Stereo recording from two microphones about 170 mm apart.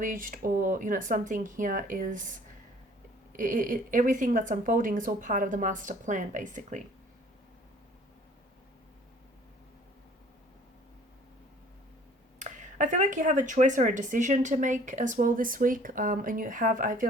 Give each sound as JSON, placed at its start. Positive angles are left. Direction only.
{"t": 0.0, "sound": "speech", "side_deg": -55}
{"t": 12.4, "sound": "speech", "side_deg": -45}